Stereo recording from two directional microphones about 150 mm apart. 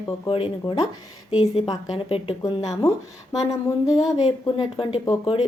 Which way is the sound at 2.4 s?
25° left (ahead or behind).